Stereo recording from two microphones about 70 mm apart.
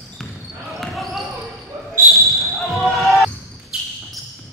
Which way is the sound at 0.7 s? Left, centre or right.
Centre.